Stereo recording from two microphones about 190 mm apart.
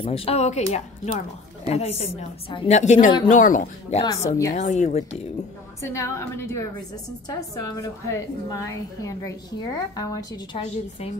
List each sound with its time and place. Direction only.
0.0 s a woman's voice: 30° left (ahead or behind)
4.3 s a woman's voice: 15° left (ahead or behind)
4.6 s a woman's voice: 40° left (ahead or behind)
5.8 s a woman's voice: 15° left (ahead or behind)